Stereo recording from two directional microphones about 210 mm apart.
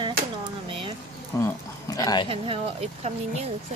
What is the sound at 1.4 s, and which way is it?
Speech, 15° left (ahead or behind).